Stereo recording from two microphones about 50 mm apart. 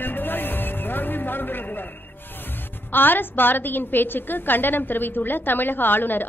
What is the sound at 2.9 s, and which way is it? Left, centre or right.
A woman's voice, left.